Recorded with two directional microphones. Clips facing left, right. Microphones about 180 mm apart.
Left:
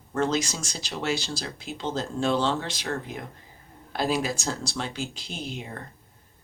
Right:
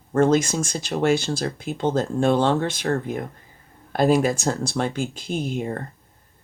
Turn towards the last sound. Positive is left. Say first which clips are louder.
# right 10 dB
turn(degrees=-50)  # may be behind; listen again after turning